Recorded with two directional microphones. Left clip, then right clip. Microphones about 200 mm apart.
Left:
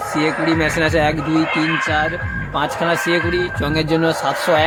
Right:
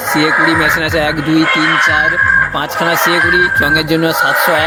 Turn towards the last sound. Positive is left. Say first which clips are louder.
# right 6 dB
turn(degrees=-15)  # may be behind; listen again after turning